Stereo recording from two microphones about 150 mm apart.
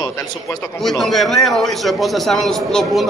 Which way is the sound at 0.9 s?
Centre (ahead or behind).